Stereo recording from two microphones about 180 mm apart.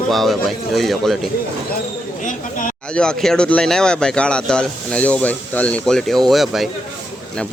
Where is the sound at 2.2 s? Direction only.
45° left (ahead or behind).